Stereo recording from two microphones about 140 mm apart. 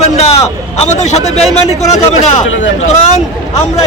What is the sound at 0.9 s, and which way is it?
Speech, 55° left (ahead or behind).